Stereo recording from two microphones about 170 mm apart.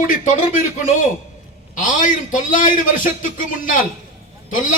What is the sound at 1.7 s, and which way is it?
A man's voice, 50° left (ahead or behind).